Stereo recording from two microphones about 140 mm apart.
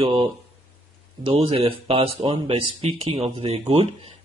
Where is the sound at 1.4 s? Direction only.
40° right (ahead or behind).